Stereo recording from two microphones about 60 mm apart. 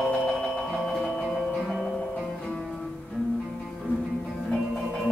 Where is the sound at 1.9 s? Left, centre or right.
Centre.